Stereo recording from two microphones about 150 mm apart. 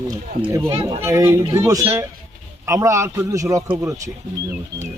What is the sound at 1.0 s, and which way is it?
Speech, 20° right (ahead or behind).